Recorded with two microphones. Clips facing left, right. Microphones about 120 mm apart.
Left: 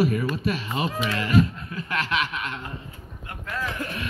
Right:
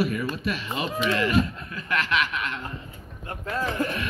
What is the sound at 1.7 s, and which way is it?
Speech, 30° left (ahead or behind).